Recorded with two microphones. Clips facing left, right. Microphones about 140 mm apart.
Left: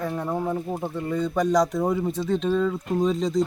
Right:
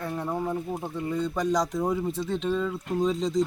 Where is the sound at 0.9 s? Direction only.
Centre (ahead or behind).